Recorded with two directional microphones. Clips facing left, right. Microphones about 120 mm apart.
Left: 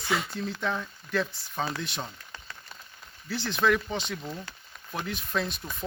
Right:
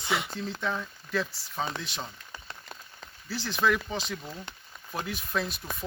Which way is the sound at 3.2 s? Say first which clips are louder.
Left 2 dB; centre (ahead or behind).